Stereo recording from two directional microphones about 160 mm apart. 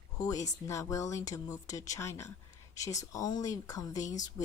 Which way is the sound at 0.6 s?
20° left (ahead or behind).